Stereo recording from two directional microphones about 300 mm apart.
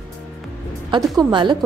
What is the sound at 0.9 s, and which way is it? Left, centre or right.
Speech, centre.